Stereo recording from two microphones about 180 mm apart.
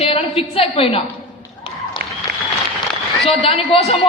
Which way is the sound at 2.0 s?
60° right (ahead or behind).